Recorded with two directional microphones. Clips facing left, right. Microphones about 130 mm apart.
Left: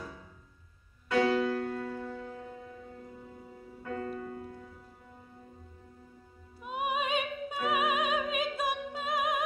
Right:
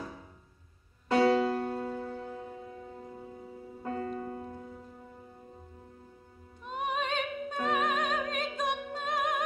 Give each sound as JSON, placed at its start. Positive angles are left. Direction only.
{"t": 1.0, "sound": "music", "side_deg": -30}
{"t": 3.8, "sound": "music", "side_deg": -30}
{"t": 6.6, "sound": "opera", "side_deg": 10}